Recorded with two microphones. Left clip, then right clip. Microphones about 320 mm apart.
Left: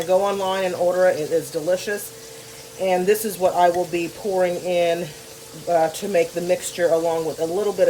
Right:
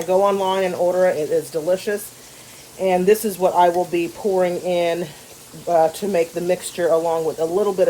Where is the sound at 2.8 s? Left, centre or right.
Right.